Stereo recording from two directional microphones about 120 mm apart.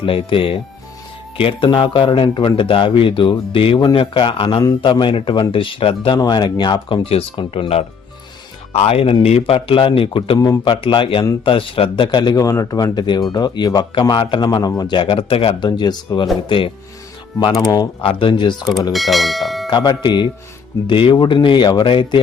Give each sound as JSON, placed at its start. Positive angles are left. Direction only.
{"t": 0.0, "sound": "speech", "side_deg": 45}
{"t": 6.1, "sound": "a man's voice", "side_deg": 35}
{"t": 10.3, "sound": "a man's voice", "side_deg": 30}
{"t": 17.6, "sound": "a man's voice", "side_deg": 30}
{"t": 18.0, "sound": "speech", "side_deg": 50}
{"t": 18.9, "sound": "speech", "side_deg": 0}
{"t": 19.7, "sound": "a man's voice", "side_deg": 35}